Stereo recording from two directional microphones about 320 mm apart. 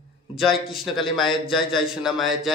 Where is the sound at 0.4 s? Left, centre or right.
Centre.